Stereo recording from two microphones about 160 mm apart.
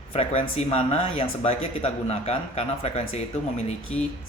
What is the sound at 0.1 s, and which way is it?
Speech, 40° left (ahead or behind).